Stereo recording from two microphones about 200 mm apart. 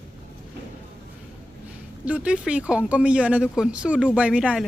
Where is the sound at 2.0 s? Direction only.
5° right (ahead or behind).